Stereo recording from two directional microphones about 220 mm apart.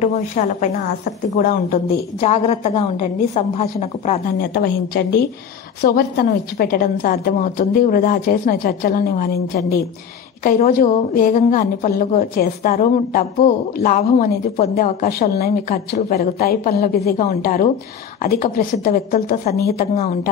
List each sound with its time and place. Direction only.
0.0 s a woman's voice: 30° left (ahead or behind)
4.4 s a woman's voice: 45° left (ahead or behind)